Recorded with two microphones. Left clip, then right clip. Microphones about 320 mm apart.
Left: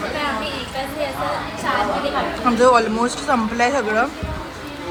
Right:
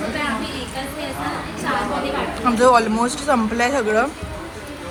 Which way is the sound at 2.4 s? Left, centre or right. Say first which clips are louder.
Even; centre.